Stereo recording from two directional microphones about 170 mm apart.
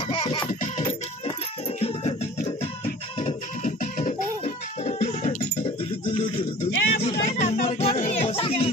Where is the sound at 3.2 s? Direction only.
45° left (ahead or behind).